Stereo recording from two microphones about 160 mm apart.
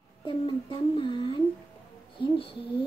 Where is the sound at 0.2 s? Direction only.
30° left (ahead or behind).